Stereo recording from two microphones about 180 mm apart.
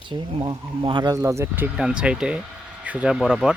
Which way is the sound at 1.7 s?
5° right (ahead or behind).